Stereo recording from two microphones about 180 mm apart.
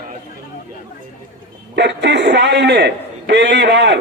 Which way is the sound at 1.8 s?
70° right (ahead or behind).